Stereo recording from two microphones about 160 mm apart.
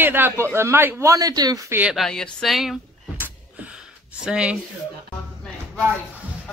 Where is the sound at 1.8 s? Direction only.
5° right (ahead or behind).